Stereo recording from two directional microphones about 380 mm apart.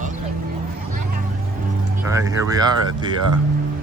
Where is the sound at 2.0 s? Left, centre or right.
Centre.